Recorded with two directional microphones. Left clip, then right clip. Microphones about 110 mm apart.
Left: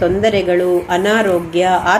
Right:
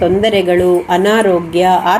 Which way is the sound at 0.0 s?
25° right (ahead or behind).